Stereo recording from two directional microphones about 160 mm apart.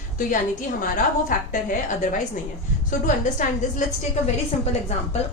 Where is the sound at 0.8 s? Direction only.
55° left (ahead or behind).